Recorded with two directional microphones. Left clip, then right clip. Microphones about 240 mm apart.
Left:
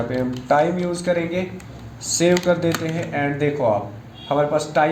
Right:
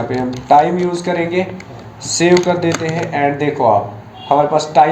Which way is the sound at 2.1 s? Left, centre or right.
Left.